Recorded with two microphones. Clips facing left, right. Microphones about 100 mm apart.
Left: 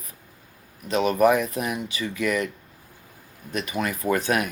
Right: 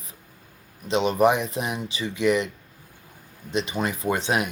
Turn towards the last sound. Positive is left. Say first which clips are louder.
# left 1 dB
turn(degrees=-25)  # may be behind; listen again after turning